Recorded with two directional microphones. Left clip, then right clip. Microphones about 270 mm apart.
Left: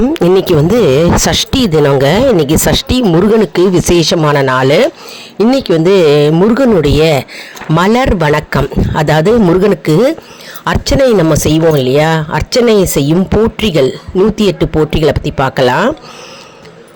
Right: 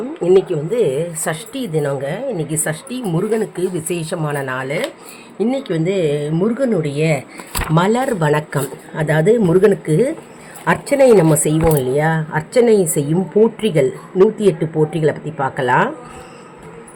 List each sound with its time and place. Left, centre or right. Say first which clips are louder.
0.1 s speech: even; left